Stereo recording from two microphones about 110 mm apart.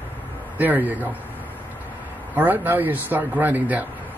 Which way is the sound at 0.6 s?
15° right (ahead or behind).